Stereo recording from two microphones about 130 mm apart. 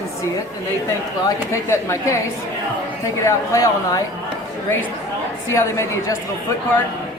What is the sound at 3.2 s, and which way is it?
Speech, 25° left (ahead or behind).